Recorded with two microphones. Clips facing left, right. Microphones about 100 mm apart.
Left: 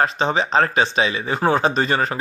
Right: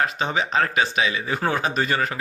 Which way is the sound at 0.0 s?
35° left (ahead or behind).